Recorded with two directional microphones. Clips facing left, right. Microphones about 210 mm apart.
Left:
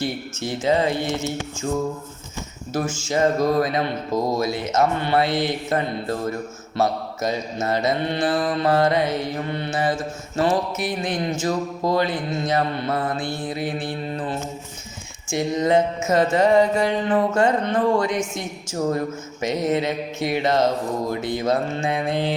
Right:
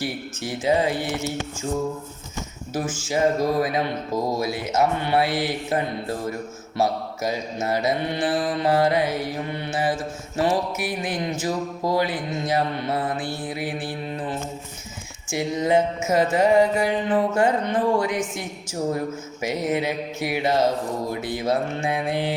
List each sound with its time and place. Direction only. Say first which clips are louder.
0.0 s speech: left 2 dB; 15° right (ahead or behind)
2.7 s speech: left 2 dB; 10° right (ahead or behind)
18.9 s speech: left 1 dB; 10° right (ahead or behind)